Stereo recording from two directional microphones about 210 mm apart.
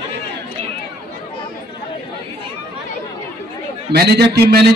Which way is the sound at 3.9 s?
50° right (ahead or behind).